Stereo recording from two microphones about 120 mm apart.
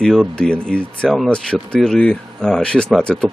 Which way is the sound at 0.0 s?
5° left (ahead or behind).